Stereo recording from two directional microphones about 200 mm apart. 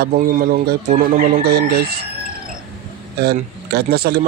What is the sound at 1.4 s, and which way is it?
Speech, 50° right (ahead or behind).